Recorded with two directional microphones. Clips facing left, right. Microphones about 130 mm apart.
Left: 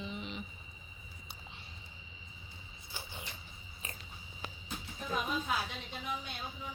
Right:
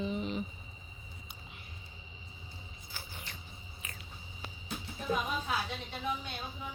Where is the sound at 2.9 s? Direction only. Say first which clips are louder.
Left 2 dB; 20° left (ahead or behind).